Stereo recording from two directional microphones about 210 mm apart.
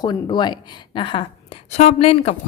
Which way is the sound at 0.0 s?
20° left (ahead or behind).